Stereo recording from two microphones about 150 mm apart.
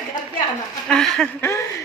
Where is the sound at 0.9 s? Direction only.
5° left (ahead or behind).